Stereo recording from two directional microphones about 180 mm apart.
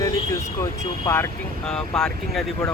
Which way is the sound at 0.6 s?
15° left (ahead or behind).